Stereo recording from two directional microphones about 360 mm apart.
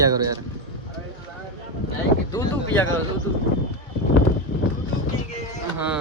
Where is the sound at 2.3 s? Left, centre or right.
Centre.